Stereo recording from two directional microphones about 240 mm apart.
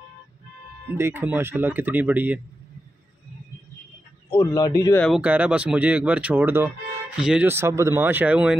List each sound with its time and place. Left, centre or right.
0.9 s speech: centre
4.3 s speech: centre
5.0 s speech: centre